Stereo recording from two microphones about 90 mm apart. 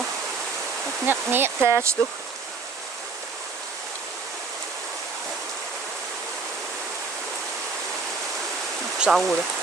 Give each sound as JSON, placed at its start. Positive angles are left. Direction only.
{"t": 1.0, "sound": "speech", "side_deg": -20}
{"t": 9.0, "sound": "stream", "side_deg": 0}